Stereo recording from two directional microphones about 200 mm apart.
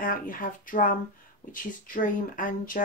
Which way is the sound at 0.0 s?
45° left (ahead or behind).